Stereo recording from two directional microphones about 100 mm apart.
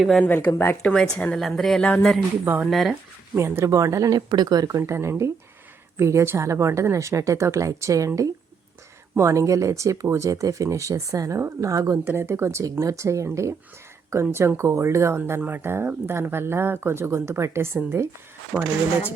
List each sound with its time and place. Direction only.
0.2 s speech: 20° left (ahead or behind)
1.4 s speech: centre (ahead or behind)
2.4 s speech: 20° right (ahead or behind)
2.6 s speech: centre (ahead or behind)
3.3 s speech: 25° right (ahead or behind)
4.8 s speech: 25° right (ahead or behind)
18.5 s speech: 15° right (ahead or behind)